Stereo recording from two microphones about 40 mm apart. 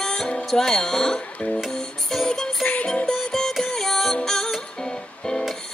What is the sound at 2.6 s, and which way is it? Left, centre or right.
Music, left.